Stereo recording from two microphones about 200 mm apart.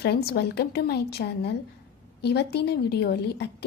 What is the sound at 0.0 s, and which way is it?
A woman's voice, 55° left (ahead or behind).